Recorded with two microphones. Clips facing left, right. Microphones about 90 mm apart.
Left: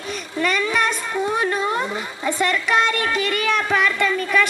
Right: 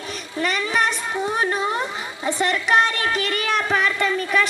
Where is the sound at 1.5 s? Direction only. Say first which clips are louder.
Left 1 dB; 20° right (ahead or behind).